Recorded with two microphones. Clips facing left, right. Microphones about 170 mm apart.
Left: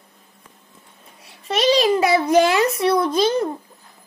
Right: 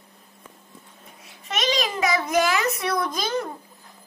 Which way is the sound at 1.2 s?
30° left (ahead or behind).